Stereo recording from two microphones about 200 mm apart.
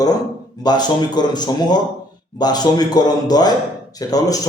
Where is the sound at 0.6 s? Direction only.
20° left (ahead or behind).